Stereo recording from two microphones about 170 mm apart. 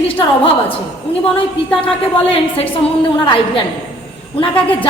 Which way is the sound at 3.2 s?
30° left (ahead or behind).